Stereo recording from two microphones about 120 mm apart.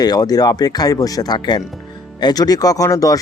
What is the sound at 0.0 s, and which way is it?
Speech, 35° left (ahead or behind).